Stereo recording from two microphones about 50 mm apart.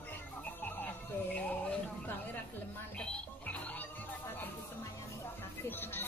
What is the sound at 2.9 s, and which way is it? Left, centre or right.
Music, left.